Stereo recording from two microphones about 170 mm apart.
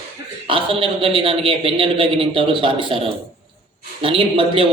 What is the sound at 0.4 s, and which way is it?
A man's voice, 30° right (ahead or behind).